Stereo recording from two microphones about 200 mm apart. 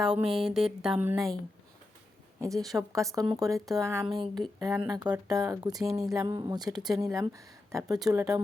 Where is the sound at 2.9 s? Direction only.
15° right (ahead or behind).